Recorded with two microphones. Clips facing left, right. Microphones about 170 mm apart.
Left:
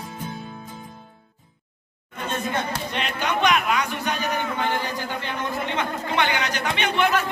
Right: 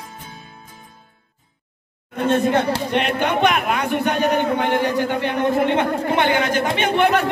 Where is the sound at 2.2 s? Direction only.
65° right (ahead or behind).